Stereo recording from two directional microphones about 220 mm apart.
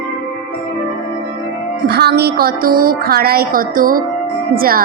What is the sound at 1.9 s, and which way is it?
A woman's voice, 45° right (ahead or behind).